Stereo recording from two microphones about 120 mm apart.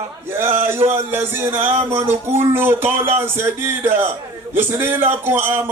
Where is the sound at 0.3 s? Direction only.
20° right (ahead or behind).